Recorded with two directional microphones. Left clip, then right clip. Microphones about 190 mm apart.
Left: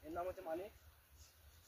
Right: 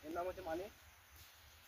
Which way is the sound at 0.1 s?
15° left (ahead or behind).